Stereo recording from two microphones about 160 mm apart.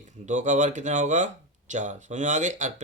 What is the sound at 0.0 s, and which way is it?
Speech, 50° right (ahead or behind).